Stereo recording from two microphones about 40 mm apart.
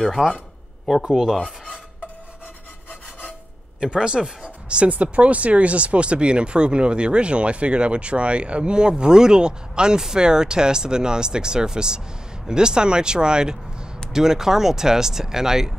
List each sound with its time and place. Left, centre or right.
0.2 s speech: centre
3.9 s speech: right